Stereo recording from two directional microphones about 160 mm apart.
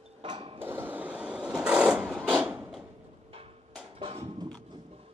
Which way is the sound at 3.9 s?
35° right (ahead or behind).